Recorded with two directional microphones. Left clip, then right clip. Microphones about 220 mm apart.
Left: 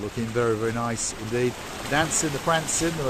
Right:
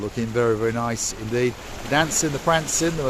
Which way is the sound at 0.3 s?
25° right (ahead or behind).